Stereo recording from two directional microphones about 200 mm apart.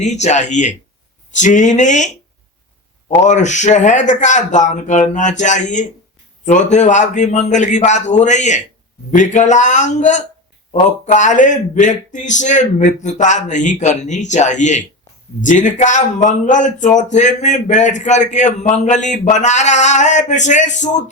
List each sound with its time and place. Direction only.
0.0 s speech: 35° left (ahead or behind)
3.2 s speech: 35° left (ahead or behind)